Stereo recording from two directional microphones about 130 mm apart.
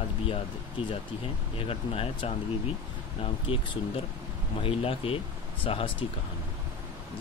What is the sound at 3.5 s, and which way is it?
Speech, 45° left (ahead or behind).